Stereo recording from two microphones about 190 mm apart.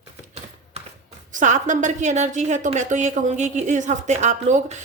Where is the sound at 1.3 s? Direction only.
40° right (ahead or behind).